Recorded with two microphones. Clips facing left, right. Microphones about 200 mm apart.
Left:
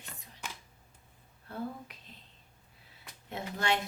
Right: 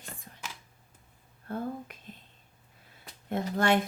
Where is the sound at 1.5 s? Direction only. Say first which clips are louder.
Right 4 dB; 50° right (ahead or behind).